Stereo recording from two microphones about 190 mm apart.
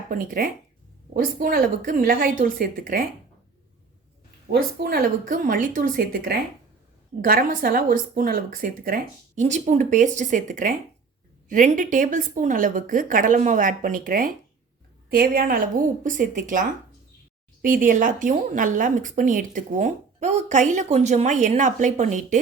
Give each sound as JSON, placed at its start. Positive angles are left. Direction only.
{"t": 0.1, "sound": "speech", "side_deg": -45}
{"t": 4.5, "sound": "speech", "side_deg": -55}